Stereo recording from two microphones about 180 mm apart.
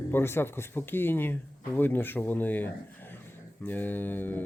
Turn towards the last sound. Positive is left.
turn(degrees=10)  # may be behind; listen again after turning